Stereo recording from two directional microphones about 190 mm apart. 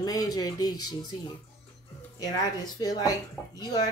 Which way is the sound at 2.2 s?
20° left (ahead or behind).